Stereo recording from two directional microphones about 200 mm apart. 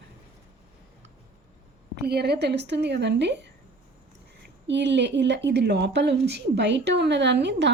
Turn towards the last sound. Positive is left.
turn(degrees=-60)  # may be behind; listen again after turning